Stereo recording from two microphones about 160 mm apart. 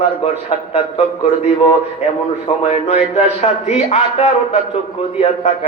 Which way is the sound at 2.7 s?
40° left (ahead or behind).